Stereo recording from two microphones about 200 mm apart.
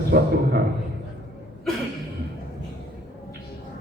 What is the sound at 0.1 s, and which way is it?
Speech, 50° right (ahead or behind).